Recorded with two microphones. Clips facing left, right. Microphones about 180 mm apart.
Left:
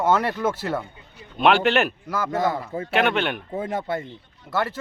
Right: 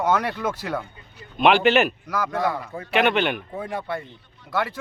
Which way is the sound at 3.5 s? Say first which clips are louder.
Left 3 dB; 25° left (ahead or behind).